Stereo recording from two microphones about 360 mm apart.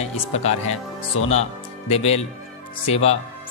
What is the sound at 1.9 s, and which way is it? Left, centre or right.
Speech, centre.